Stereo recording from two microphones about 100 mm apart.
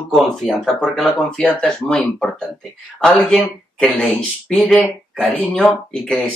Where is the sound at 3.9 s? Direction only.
15° left (ahead or behind).